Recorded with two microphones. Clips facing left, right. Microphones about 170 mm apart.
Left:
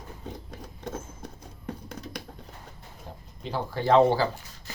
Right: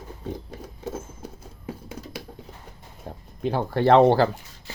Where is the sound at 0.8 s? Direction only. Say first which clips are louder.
Right 3 dB; 5° right (ahead or behind).